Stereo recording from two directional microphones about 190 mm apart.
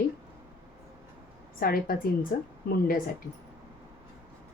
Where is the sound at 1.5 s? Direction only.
50° left (ahead or behind).